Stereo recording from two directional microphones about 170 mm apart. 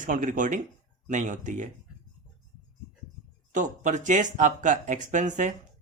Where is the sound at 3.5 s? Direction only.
45° right (ahead or behind).